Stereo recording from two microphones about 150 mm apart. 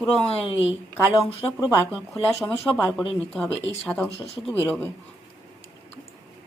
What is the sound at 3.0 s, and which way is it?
Speech, 5° left (ahead or behind).